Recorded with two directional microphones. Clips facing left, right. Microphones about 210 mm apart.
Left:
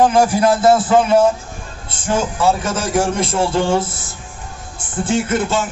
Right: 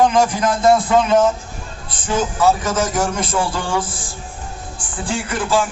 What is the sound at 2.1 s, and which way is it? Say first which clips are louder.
A man's voice: right 1 dB; 30° left (ahead or behind).